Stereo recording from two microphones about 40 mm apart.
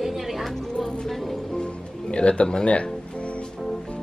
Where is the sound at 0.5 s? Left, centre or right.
Centre.